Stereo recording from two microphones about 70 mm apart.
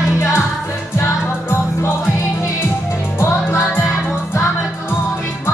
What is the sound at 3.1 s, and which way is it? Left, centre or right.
Music, left.